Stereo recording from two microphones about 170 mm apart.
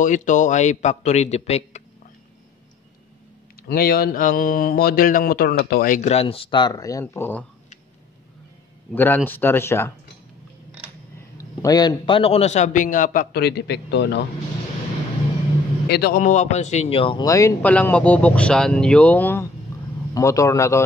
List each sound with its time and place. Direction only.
0.0 s a man's voice: 45° left (ahead or behind)
3.6 s speech: 60° left (ahead or behind); by 7.4 s 15° left (ahead or behind)
8.9 s speech: 10° left (ahead or behind)
11.3 s a man's voice: 20° left (ahead or behind); by 14.2 s 90° left
15.9 s speech: 65° left (ahead or behind)
16.2 s a man's voice: 45° left (ahead or behind)
17.3 s a man's voice: 20° left (ahead or behind)